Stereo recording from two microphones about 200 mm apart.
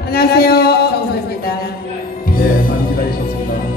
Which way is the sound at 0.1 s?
50° left (ahead or behind).